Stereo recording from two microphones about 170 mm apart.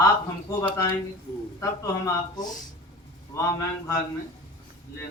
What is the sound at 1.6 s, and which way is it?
Speech, 15° left (ahead or behind).